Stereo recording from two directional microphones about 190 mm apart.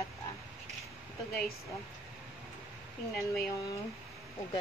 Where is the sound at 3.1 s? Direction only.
Centre (ahead or behind).